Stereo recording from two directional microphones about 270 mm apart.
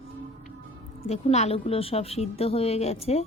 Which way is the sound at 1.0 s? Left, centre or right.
Left.